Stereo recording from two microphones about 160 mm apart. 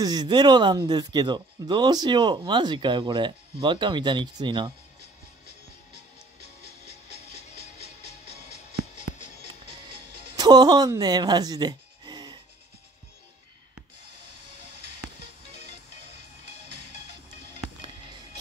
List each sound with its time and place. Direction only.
0.0 s speech: 25° right (ahead or behind)
6.4 s music: 45° left (ahead or behind)
10.3 s speech: 25° right (ahead or behind)
15.5 s music: 45° left (ahead or behind)